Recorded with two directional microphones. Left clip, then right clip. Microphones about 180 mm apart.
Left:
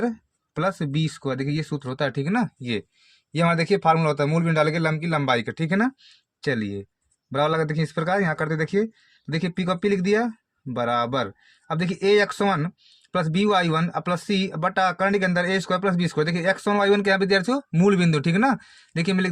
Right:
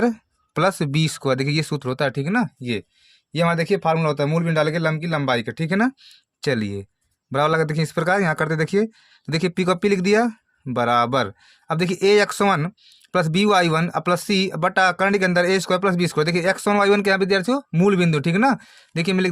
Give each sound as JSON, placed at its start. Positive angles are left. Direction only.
{"t": 0.0, "sound": "a man's voice", "side_deg": -40}